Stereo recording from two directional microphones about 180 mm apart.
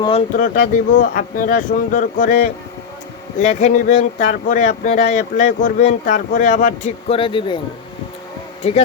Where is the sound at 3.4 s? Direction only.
40° left (ahead or behind).